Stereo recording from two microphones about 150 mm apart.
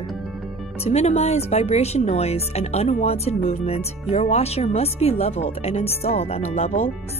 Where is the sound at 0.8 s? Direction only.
45° left (ahead or behind).